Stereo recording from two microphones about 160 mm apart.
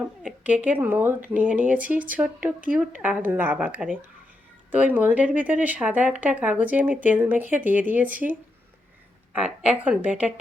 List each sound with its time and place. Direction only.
0.2 s a woman's voice: 5° right (ahead or behind)
9.3 s speech: 5° right (ahead or behind)